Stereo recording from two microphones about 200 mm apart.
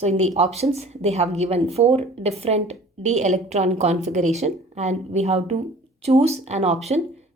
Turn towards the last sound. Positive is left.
turn(degrees=-30)  # may be behind; listen again after turning